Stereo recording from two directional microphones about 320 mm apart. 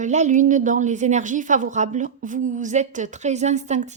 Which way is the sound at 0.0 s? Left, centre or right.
Right.